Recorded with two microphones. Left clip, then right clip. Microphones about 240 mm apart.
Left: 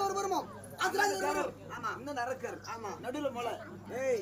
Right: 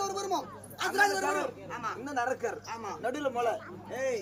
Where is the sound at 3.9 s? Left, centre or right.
Centre.